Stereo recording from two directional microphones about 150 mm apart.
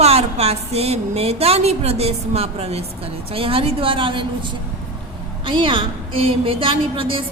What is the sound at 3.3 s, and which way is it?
Speech, 40° right (ahead or behind).